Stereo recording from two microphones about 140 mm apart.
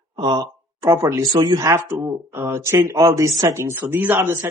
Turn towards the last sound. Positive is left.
turn(degrees=-15)  # may be behind; listen again after turning